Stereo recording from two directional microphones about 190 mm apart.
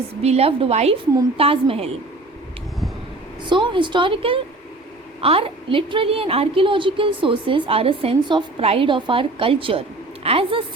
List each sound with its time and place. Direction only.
0.2 s a woman's voice: 35° right (ahead or behind)
3.4 s a woman's voice: 25° right (ahead or behind)